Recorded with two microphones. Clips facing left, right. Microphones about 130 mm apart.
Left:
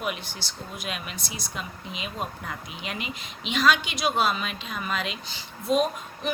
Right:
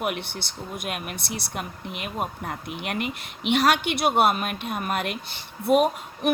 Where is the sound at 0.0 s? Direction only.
60° right (ahead or behind).